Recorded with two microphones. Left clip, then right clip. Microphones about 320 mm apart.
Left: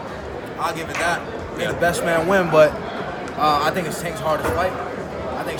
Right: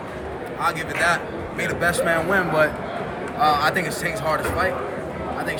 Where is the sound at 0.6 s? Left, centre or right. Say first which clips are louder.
Right 1 dB; centre.